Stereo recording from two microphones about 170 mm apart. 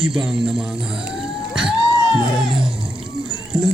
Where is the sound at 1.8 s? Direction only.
25° left (ahead or behind).